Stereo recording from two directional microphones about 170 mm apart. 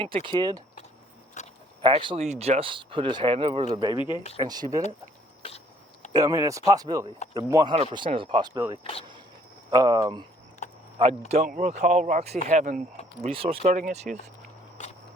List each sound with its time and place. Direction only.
0.0 s speech: 30° right (ahead or behind)
1.4 s a sound: 45° left (ahead or behind)
1.8 s speech: 30° right (ahead or behind)
2.2 s speech: 40° right (ahead or behind)
3.9 s speech: 30° left (ahead or behind)
4.4 s speech: 25° right (ahead or behind)
5.4 s a sound: 35° left (ahead or behind)
6.1 s speech: 20° right (ahead or behind)
9.6 s speech: 25° right (ahead or behind)
10.6 s a sound: 45° left (ahead or behind)
11.4 s speech: 45° right (ahead or behind)
13.2 s speech: 35° right (ahead or behind)
13.7 s speech: 45° right (ahead or behind)
14.8 s a sound: 45° left (ahead or behind)